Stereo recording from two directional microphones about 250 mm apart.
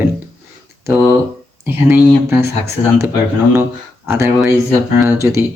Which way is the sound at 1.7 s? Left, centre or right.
Centre.